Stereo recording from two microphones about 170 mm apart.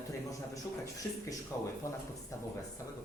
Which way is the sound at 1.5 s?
20° left (ahead or behind).